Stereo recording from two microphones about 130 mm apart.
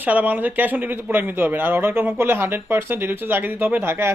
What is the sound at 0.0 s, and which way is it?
A man's voice, 10° right (ahead or behind).